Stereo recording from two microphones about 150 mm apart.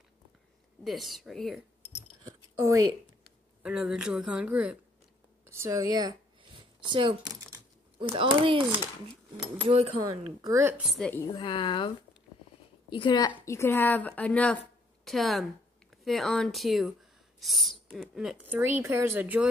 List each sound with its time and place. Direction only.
0.8 s a woman's voice: centre (ahead or behind)
2.2 s a sound: 20° right (ahead or behind)
3.6 s speech: 5° right (ahead or behind)
5.5 s speech: 20° right (ahead or behind); by 8.6 s 35° right (ahead or behind)
10.4 s a woman's voice: 20° right (ahead or behind)
10.8 s a woman's voice: centre (ahead or behind)
11.3 s speech: 35° left (ahead or behind)
12.9 s a woman's voice: 30° left (ahead or behind)
13.5 s a woman's voice: 15° left (ahead or behind); by 19.5 s 10° right (ahead or behind)